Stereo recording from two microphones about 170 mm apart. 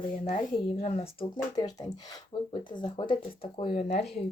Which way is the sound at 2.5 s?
25° left (ahead or behind).